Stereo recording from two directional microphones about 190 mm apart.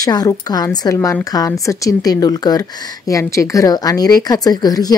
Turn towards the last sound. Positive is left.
turn(degrees=20)  # may be behind; listen again after turning